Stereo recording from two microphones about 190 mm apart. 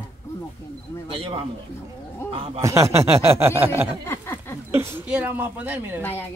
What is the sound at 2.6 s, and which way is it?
Speech, 15° right (ahead or behind).